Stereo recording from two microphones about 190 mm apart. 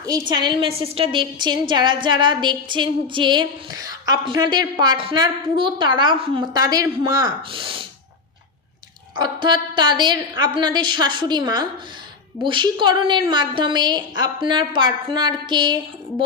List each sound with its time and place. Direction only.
0.0 s a woman's voice: 20° right (ahead or behind)
9.1 s a woman's voice: 25° right (ahead or behind)